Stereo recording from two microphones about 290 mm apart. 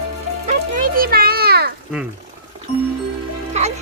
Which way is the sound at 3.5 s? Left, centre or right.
Right.